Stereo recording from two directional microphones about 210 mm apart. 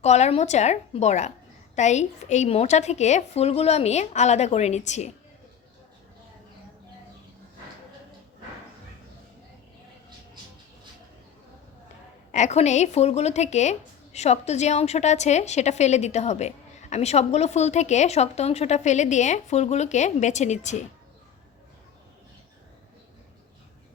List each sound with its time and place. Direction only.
0.0 s speech: 30° left (ahead or behind)
12.3 s speech: 35° left (ahead or behind)